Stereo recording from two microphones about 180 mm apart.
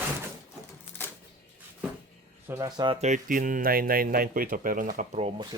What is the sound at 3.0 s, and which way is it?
Speech, 45° right (ahead or behind).